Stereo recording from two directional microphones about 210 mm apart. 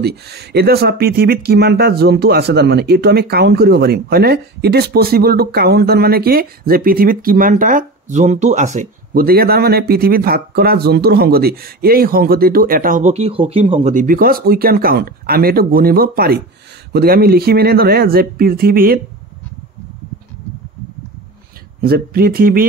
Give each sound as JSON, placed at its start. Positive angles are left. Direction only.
{"t": 0.0, "sound": "speech", "side_deg": -50}
{"t": 8.7, "sound": "speech", "side_deg": -45}
{"t": 21.8, "sound": "speech", "side_deg": -45}